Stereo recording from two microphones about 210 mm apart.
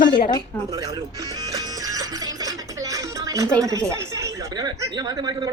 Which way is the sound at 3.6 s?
15° right (ahead or behind).